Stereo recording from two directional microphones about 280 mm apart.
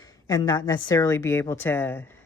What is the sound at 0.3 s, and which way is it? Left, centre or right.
Speech, centre.